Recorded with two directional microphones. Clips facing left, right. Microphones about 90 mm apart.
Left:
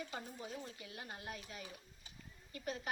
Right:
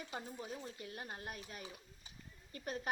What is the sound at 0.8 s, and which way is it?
A child's voice, 35° right (ahead or behind).